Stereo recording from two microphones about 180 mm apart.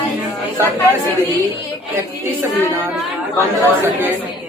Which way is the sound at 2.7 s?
10° right (ahead or behind).